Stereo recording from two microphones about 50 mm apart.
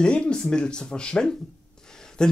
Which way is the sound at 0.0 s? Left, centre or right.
Centre.